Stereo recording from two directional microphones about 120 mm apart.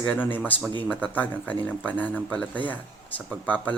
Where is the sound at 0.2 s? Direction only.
15° left (ahead or behind).